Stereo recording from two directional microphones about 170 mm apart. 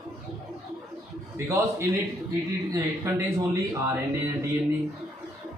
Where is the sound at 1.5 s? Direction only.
15° right (ahead or behind).